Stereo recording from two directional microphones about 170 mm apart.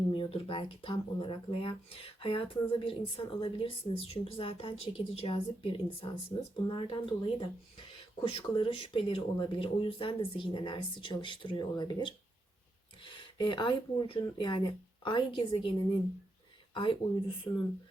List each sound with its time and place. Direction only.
0.1 s speech: 30° left (ahead or behind)
16.7 s speech: 30° left (ahead or behind)
17.5 s speech: 15° left (ahead or behind)